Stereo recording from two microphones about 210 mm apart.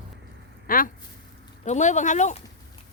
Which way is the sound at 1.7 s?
35° left (ahead or behind).